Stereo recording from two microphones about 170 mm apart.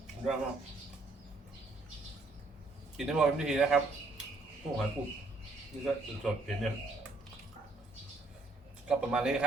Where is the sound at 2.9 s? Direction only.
5° right (ahead or behind).